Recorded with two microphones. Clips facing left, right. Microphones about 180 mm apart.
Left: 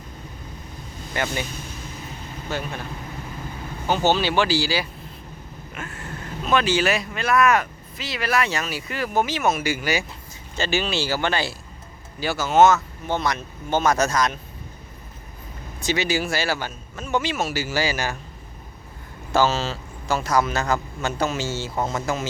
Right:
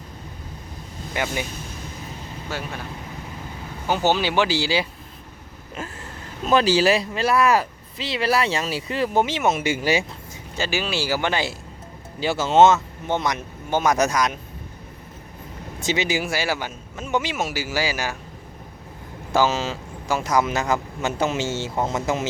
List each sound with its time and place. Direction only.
1.1 s speech: 10° right (ahead or behind)
2.5 s speech: 5° right (ahead or behind)
3.8 s speech: 10° right (ahead or behind)
6.4 s speech: 35° right (ahead or behind)
10.6 s speech: 10° right (ahead or behind)
15.8 s speech: 20° right (ahead or behind)
19.3 s speech: 10° right (ahead or behind)